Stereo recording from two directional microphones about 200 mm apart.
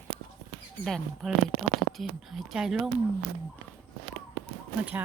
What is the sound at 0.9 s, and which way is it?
Speech, centre (ahead or behind).